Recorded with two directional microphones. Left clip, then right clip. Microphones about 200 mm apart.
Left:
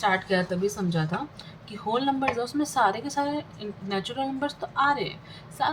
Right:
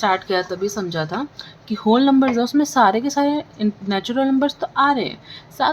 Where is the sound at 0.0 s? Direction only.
55° right (ahead or behind).